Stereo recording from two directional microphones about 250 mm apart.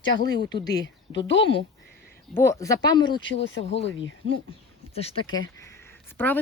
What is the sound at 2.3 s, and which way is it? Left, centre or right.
Speech, centre.